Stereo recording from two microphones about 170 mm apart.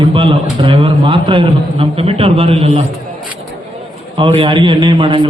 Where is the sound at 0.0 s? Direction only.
30° right (ahead or behind).